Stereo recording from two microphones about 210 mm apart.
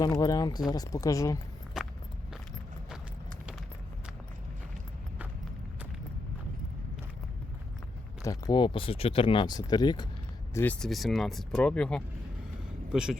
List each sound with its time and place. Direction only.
0.2 s speech: 15° left (ahead or behind)
1.7 s walk: centre (ahead or behind)
8.2 s speech: 15° left (ahead or behind)
10.5 s speech: 10° left (ahead or behind)